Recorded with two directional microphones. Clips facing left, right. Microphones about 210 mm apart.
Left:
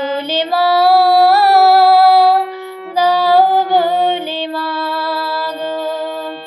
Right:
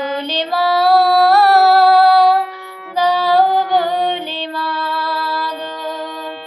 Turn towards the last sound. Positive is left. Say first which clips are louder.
# left 2 dB
turn(degrees=5)  # may be behind; listen again after turning